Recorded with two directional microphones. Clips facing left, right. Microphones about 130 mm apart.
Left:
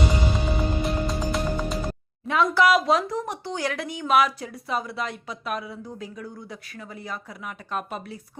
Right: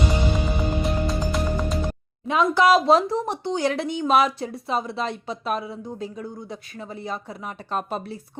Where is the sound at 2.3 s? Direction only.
20° right (ahead or behind).